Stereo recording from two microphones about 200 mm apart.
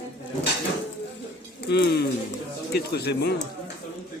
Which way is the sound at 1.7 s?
55° left (ahead or behind).